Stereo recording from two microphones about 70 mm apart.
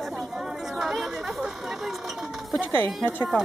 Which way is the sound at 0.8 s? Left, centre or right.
Centre.